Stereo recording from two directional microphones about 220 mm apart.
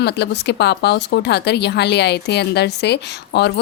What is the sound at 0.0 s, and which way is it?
A woman's voice, 50° left (ahead or behind).